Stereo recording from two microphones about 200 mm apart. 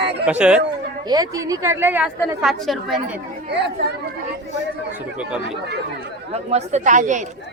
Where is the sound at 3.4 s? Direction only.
55° right (ahead or behind).